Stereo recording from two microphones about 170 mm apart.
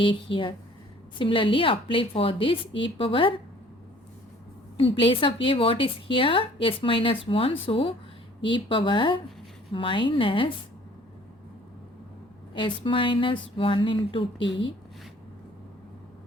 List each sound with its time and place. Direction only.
0.0 s speech: 30° left (ahead or behind)
4.8 s speech: 30° left (ahead or behind)
12.5 s speech: 30° left (ahead or behind)
14.4 s speech: 90° left